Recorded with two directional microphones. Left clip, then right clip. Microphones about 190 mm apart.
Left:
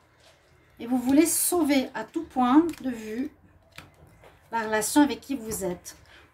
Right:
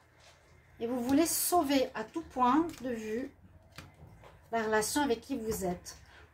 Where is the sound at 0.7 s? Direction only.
50° left (ahead or behind).